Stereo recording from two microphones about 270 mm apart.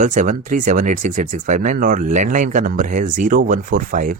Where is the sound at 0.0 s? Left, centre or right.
Right.